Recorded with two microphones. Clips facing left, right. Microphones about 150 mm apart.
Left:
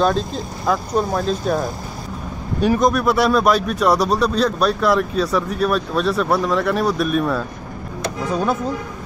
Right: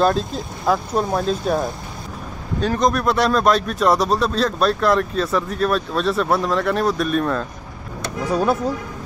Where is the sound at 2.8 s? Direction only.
Centre (ahead or behind).